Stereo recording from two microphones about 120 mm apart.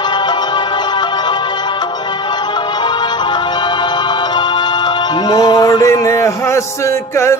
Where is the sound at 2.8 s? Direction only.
40° left (ahead or behind).